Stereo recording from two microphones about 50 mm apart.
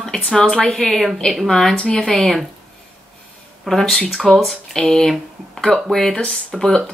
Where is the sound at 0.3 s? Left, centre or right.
Centre.